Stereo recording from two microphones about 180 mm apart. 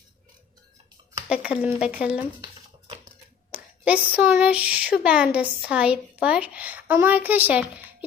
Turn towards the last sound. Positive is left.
turn(degrees=-10)  # may be behind; listen again after turning